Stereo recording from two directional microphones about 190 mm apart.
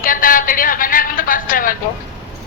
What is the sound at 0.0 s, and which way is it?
Speech, 45° left (ahead or behind).